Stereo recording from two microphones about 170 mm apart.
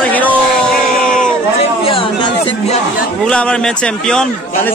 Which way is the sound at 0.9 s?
55° left (ahead or behind).